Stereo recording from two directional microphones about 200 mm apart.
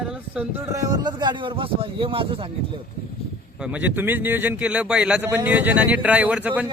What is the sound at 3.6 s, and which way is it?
A man's voice, 5° right (ahead or behind).